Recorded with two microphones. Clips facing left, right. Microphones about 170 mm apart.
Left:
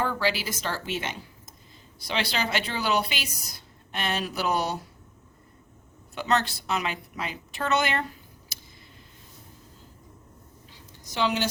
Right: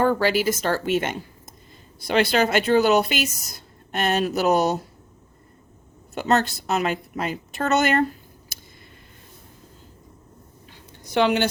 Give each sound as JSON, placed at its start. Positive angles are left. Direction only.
{"t": 0.0, "sound": "a woman's voice", "side_deg": -50}
{"t": 6.1, "sound": "a woman's voice", "side_deg": -45}
{"t": 10.7, "sound": "a sound", "side_deg": -60}